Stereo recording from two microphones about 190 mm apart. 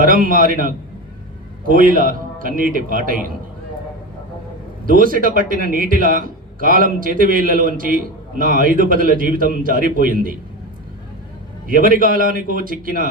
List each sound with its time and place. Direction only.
0.0 s a man's voice: 45° right (ahead or behind)
4.9 s a man's voice: 45° right (ahead or behind)
11.7 s a man's voice: 45° right (ahead or behind)